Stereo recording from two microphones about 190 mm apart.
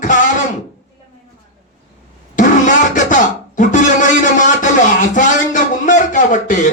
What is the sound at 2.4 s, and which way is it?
Vehicle, 40° left (ahead or behind).